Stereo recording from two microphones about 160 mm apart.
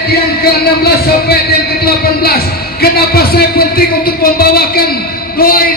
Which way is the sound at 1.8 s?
75° left (ahead or behind).